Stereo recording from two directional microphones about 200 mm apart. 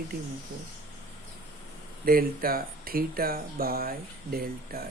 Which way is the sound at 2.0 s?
45° right (ahead or behind).